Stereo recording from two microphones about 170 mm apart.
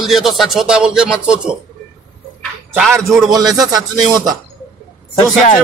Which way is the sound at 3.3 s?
20° right (ahead or behind).